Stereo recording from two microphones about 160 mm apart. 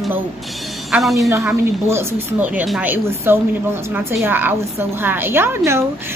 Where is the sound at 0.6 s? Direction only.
Centre (ahead or behind).